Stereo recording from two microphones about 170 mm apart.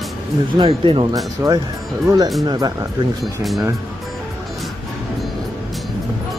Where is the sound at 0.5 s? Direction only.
30° right (ahead or behind).